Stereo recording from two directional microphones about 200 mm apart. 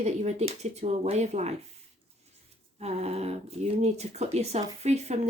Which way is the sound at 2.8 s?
30° right (ahead or behind).